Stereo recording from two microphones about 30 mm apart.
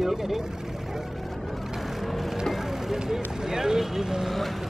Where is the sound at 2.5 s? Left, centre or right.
Centre.